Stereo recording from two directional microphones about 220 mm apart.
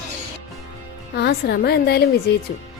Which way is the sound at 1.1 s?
50° left (ahead or behind).